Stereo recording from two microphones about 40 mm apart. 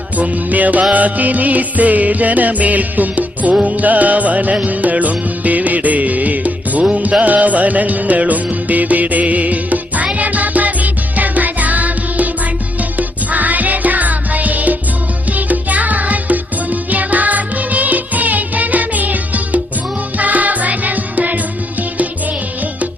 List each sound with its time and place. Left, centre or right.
0.2 s music: right